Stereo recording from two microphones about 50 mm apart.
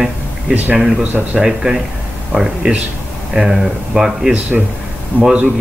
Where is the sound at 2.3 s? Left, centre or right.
Right.